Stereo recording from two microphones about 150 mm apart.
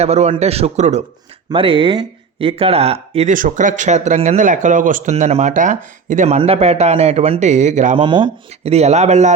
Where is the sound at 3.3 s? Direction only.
60° right (ahead or behind).